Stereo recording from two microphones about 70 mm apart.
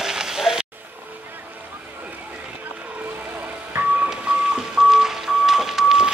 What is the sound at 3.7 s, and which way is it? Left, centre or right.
Music, right.